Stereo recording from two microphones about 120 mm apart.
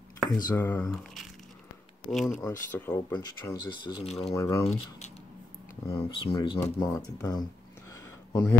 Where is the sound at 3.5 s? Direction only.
40° left (ahead or behind).